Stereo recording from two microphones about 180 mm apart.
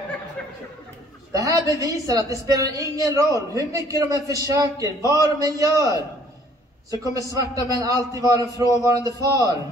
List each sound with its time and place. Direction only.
1.3 s a woman's voice: 20° right (ahead or behind)